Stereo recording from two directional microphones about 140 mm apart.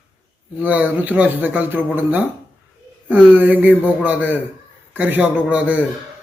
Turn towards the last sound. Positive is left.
turn(degrees=-10)  # may be behind; listen again after turning